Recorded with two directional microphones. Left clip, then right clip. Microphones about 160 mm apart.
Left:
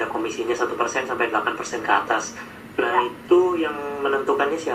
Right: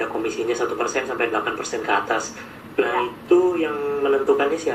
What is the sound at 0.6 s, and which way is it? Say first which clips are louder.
Speech: even; 50° right (ahead or behind).